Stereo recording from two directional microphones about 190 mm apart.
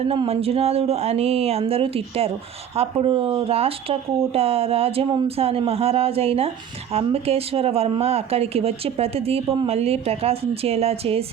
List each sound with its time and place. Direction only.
0.1 s speech: 30° right (ahead or behind)